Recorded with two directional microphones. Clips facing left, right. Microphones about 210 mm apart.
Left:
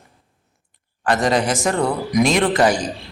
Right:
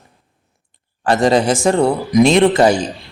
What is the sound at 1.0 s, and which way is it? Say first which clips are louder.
A man's voice: right 5 dB; 30° right (ahead or behind).